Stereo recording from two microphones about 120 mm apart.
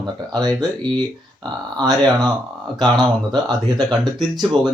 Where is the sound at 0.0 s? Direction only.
35° right (ahead or behind).